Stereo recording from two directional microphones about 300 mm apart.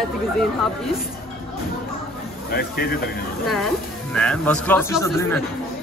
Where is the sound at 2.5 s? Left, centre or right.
Left.